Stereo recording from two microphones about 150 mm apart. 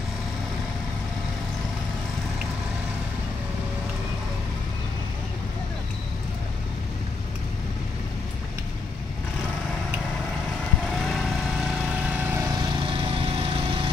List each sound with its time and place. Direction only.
11.0 s vehicle: centre (ahead or behind)
12.5 s lawn mower: 30° right (ahead or behind)